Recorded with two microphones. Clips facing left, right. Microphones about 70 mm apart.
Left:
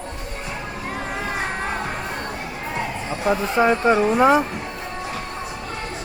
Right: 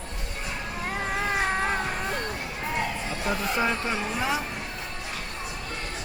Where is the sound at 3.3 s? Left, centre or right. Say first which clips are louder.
Left 8 dB; left.